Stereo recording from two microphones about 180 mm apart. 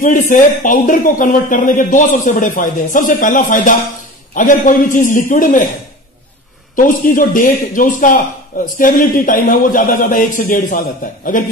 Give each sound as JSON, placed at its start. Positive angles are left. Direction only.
{"t": 0.0, "sound": "a man's voice", "side_deg": 45}
{"t": 6.7, "sound": "a man's voice", "side_deg": 45}